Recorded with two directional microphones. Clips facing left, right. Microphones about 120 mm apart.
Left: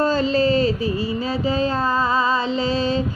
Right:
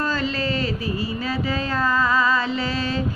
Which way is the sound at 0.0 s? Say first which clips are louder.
Left 6 dB; 30° left (ahead or behind).